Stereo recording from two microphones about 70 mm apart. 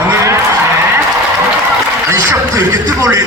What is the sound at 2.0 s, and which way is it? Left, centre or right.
A man's voice, right.